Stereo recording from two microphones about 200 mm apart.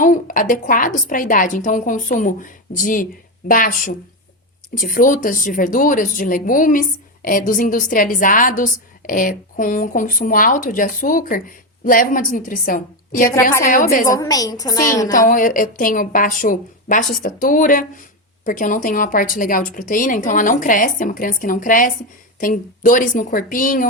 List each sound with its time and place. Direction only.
0.0 s a woman's voice: 40° left (ahead or behind)
14.1 s a woman's voice: 15° left (ahead or behind)
15.1 s a woman's voice: 40° left (ahead or behind)